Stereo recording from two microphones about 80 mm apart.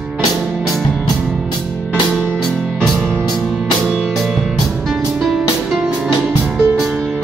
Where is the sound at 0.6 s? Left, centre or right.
Centre.